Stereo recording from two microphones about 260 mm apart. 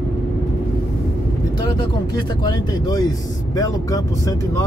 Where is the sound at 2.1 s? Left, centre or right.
Centre.